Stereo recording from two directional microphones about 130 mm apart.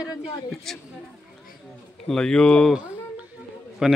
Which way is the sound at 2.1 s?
5° left (ahead or behind).